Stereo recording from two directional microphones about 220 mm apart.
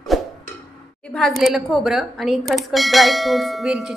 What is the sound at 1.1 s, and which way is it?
Speech, centre (ahead or behind).